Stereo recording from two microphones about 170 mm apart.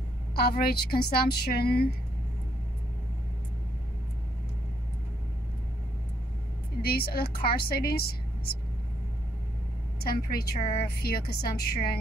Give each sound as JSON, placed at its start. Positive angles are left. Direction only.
{"t": 0.4, "sound": "speech", "side_deg": 65}
{"t": 6.8, "sound": "speech", "side_deg": 65}
{"t": 9.9, "sound": "a woman's voice", "side_deg": 65}